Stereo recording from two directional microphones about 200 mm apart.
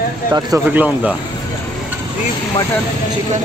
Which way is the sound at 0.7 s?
5° right (ahead or behind).